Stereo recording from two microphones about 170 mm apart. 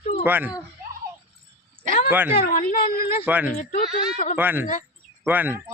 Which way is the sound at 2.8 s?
60° left (ahead or behind).